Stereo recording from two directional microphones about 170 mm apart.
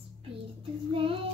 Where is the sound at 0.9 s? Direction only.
30° right (ahead or behind).